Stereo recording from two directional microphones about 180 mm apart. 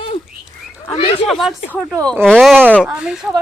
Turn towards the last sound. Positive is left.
turn(degrees=-5)  # may be behind; listen again after turning